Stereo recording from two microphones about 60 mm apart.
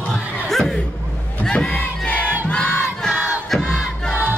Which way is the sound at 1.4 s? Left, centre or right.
Centre.